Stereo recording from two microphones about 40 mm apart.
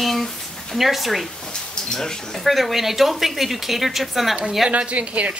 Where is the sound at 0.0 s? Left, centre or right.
Centre.